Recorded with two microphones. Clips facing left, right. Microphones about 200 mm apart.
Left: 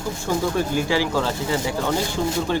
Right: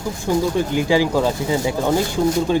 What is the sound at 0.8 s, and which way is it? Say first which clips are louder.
Speech: right 4 dB; 15° right (ahead or behind).